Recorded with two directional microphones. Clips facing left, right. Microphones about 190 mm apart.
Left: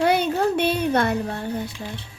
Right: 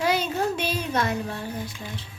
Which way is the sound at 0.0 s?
60° left (ahead or behind).